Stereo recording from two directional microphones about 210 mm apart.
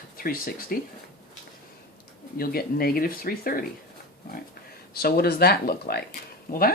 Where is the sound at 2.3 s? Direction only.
45° left (ahead or behind).